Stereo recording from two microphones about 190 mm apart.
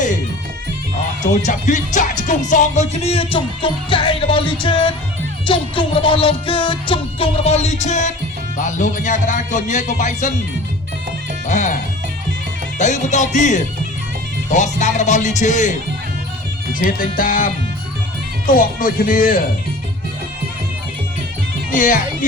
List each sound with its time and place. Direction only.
1.5 s a man's voice: 40° left (ahead or behind)
2.5 s music: 40° left (ahead or behind)
8.5 s a man's voice: 40° left (ahead or behind)
11.4 s a man's voice: 40° left (ahead or behind)
12.8 s a man's voice: 40° left (ahead or behind)
21.7 s speech: 45° left (ahead or behind)